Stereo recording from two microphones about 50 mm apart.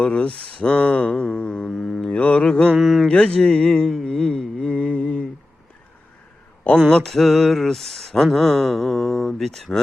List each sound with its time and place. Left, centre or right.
0.0 s speech: left
1.1 s mantra: centre
2.0 s mantra: left
2.7 s a sound: centre
3.1 s speech: left
4.7 s mantra: left
6.7 s a sound: centre